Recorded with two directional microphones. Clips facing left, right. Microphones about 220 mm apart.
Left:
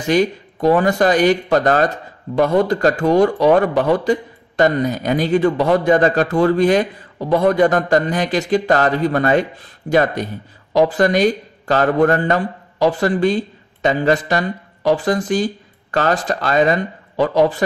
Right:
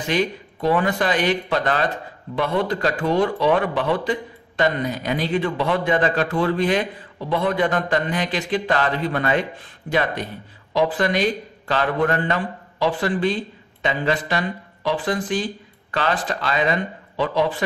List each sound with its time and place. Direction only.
0.0 s a man's voice: 45° left (ahead or behind)